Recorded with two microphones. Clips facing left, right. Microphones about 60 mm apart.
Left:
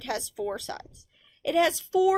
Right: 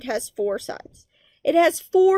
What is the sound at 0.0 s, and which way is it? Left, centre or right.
A woman's voice, right.